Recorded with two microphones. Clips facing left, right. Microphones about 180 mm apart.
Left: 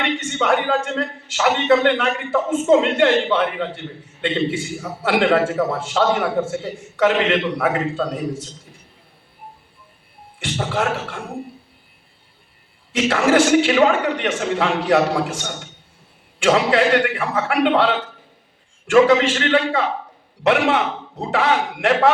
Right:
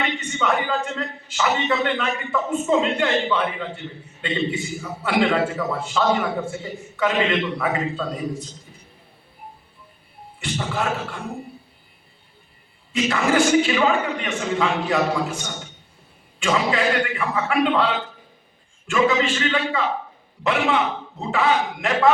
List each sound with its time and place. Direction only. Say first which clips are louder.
0.0 s a man's voice: left 3 dB; 75° left (ahead or behind)
10.4 s a man's voice: left 3 dB; 75° left (ahead or behind)
12.9 s a man's voice: left 4 dB; 75° left (ahead or behind)
16.4 s a man's voice: left 5 dB; 75° left (ahead or behind)